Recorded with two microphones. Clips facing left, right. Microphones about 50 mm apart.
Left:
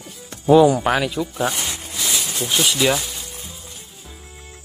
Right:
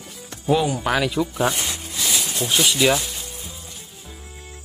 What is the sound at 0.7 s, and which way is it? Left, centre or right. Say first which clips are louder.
Music: left 1 dB; centre.